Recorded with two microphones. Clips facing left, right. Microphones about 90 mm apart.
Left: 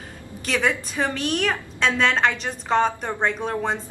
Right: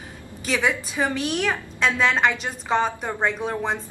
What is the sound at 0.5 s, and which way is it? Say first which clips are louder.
A woman's voice: even; 5° right (ahead or behind).